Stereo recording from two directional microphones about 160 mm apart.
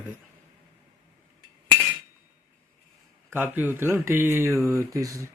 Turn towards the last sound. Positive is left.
turn(degrees=-20)  # may be behind; listen again after turning